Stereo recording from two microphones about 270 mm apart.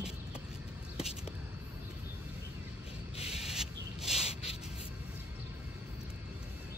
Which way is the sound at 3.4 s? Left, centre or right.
Centre.